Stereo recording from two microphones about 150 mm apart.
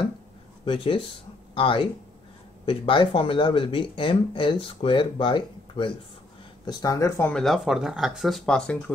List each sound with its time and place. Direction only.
0.7 s speech: 35° left (ahead or behind); by 8.9 s 5° left (ahead or behind)